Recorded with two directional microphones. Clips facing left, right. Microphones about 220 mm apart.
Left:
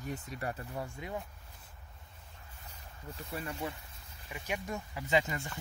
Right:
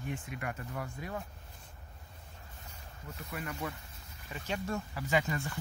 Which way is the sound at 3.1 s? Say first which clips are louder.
Left 1 dB; 30° left (ahead or behind).